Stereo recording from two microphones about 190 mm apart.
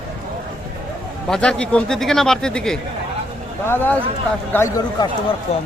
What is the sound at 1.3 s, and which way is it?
Speech, 5° left (ahead or behind).